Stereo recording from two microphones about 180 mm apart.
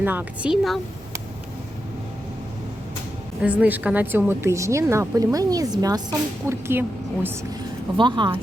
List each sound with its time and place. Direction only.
0.0 s speech: 10° right (ahead or behind)
3.4 s a woman's voice: 10° right (ahead or behind)
7.9 s speech: 25° right (ahead or behind)